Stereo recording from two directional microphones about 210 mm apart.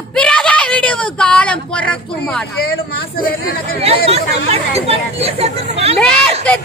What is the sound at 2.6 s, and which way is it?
Speech, 45° left (ahead or behind).